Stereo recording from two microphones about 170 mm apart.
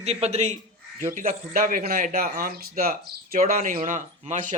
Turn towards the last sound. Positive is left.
turn(degrees=-50)  # may be behind; listen again after turning